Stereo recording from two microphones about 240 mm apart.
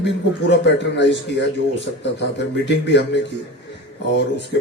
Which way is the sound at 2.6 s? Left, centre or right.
Left.